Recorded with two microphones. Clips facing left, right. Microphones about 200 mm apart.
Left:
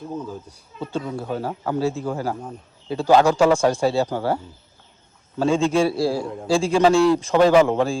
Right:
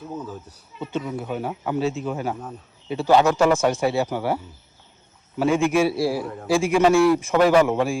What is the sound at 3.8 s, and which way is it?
Speech, 15° right (ahead or behind).